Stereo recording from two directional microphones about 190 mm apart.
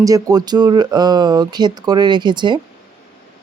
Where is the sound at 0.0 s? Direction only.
20° right (ahead or behind).